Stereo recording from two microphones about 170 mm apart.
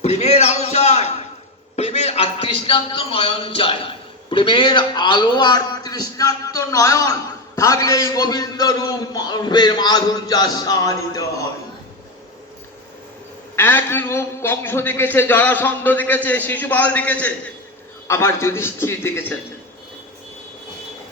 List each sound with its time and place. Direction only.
0.0 s a sound: 40° left (ahead or behind)
1.7 s a man's voice: 40° left (ahead or behind); by 11.4 s 20° left (ahead or behind)
13.6 s a man's voice: 10° left (ahead or behind)